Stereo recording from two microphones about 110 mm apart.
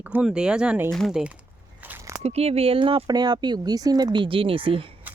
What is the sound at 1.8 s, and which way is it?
Biting, 15° right (ahead or behind).